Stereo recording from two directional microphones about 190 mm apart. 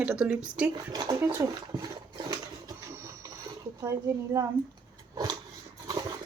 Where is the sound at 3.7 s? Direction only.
15° right (ahead or behind).